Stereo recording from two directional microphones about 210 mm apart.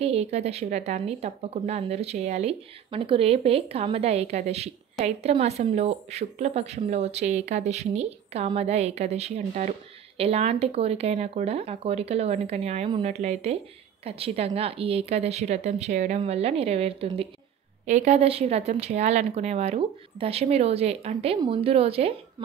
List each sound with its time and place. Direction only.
0.0 s a woman's voice: 30° right (ahead or behind)